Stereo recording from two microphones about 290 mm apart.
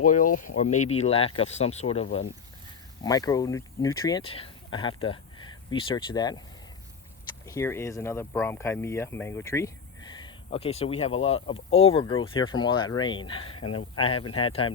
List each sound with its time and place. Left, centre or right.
0.0 s speech: left
7.4 s speech: centre
13.6 s speech: left
13.9 s speech: centre